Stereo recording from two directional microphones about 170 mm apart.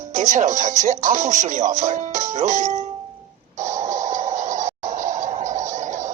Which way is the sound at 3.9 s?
45° right (ahead or behind).